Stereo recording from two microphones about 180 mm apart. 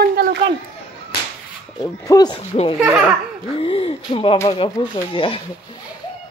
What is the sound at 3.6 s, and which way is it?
Speech, 30° left (ahead or behind).